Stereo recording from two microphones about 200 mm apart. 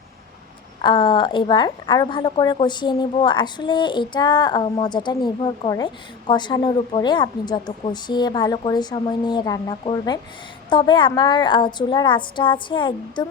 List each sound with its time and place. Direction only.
0.8 s a woman's voice: 25° left (ahead or behind)